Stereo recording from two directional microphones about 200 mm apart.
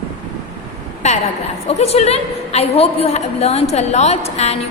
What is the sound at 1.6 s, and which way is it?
A woman's voice, 30° left (ahead or behind).